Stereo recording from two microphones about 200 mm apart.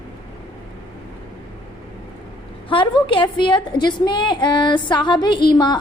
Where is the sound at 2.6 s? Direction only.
25° left (ahead or behind).